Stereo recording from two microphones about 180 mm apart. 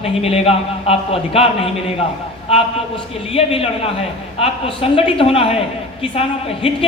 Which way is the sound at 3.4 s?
35° left (ahead or behind).